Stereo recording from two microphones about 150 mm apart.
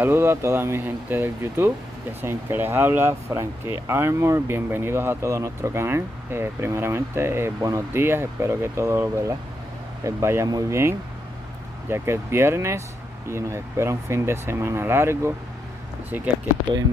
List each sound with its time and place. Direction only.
0.0 s speech: 15° right (ahead or behind)